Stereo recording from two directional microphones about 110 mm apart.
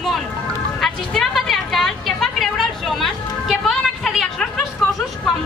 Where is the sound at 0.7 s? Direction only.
Centre (ahead or behind).